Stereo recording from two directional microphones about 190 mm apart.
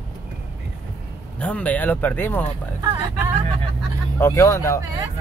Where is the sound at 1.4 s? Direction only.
5° left (ahead or behind).